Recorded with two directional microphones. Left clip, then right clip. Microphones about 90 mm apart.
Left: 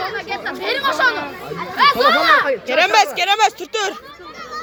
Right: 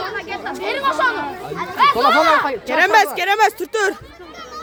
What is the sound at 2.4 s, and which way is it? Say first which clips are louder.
Speech: left 1 dB; 80° right.